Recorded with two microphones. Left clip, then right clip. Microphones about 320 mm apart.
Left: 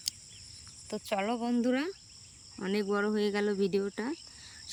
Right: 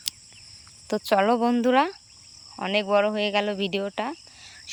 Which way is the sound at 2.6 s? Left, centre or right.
Centre.